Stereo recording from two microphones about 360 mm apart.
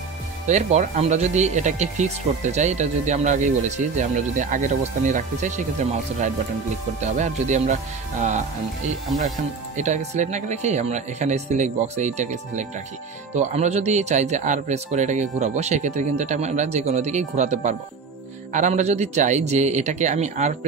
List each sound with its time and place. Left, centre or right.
0.5 s speech: centre
7.0 s speech: centre
9.8 s speech: centre